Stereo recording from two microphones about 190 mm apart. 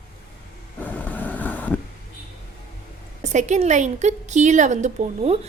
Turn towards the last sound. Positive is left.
turn(degrees=-35)  # may be behind; listen again after turning